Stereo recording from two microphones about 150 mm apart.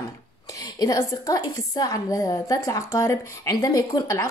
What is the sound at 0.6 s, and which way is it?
A woman's voice, 25° left (ahead or behind).